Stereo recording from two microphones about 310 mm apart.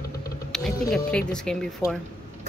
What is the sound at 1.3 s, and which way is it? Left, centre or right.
Speech, centre.